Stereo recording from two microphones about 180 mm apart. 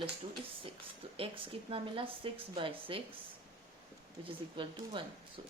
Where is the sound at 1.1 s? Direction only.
30° right (ahead or behind).